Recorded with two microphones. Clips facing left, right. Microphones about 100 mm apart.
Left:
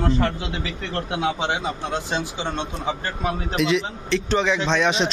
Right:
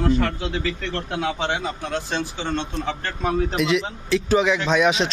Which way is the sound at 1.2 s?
15° left (ahead or behind).